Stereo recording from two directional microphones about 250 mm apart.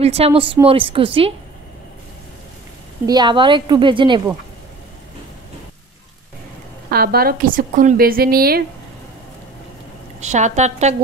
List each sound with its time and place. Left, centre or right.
0.0 s a woman's voice: right
3.1 s a woman's voice: centre
6.9 s a woman's voice: right
10.2 s a woman's voice: right